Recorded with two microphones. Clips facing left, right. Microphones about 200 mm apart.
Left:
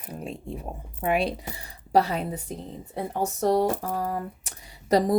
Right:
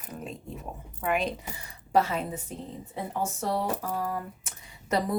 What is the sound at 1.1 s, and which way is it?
Speech, 35° left (ahead or behind).